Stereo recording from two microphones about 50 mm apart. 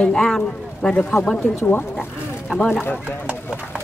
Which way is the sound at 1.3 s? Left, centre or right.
Left.